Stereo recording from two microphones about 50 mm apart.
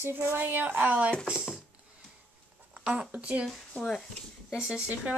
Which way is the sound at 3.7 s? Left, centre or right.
Centre.